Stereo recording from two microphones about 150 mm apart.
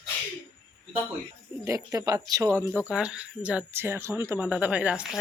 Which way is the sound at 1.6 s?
20° right (ahead or behind).